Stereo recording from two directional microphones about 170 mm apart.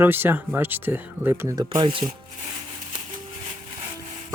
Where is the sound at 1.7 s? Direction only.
30° right (ahead or behind).